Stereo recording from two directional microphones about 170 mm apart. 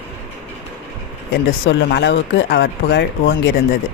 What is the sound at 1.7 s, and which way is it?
Speech, 90° left.